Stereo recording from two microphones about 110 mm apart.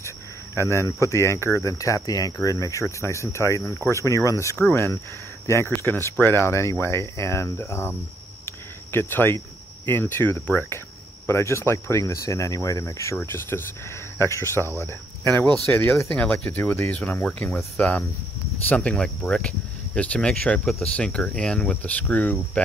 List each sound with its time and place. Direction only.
0.6 s speech: 25° left (ahead or behind)
8.5 s a sound: 20° left (ahead or behind)
9.8 s speech: 20° left (ahead or behind)